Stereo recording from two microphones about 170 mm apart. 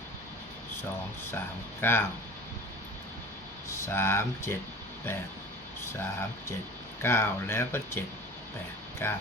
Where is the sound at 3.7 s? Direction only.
15° left (ahead or behind).